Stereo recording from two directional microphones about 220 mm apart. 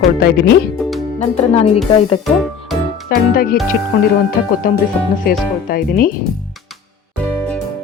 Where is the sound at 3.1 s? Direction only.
40° left (ahead or behind).